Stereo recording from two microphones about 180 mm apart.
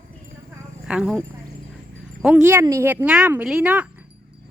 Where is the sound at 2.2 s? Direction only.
10° right (ahead or behind).